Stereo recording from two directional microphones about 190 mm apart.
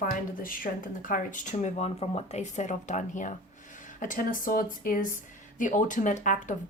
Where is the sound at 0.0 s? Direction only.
45° left (ahead or behind).